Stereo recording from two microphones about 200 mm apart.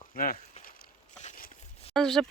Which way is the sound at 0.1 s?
45° left (ahead or behind).